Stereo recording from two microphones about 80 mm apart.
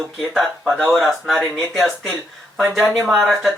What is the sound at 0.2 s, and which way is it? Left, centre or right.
Speech, centre.